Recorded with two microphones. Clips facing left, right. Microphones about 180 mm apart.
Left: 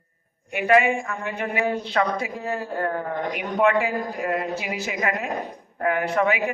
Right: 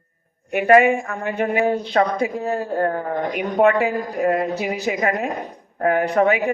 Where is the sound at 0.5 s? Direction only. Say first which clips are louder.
Right 5 dB; 45° right (ahead or behind).